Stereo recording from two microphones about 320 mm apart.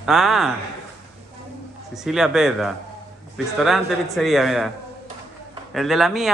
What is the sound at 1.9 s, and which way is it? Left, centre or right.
A man's voice, centre.